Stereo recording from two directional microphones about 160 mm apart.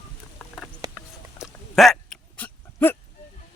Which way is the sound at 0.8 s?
25° right (ahead or behind).